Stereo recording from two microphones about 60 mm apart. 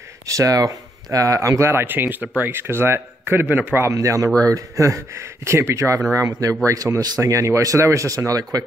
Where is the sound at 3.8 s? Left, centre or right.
Right.